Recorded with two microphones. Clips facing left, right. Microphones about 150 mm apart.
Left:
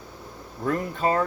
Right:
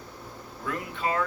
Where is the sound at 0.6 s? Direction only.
40° left (ahead or behind).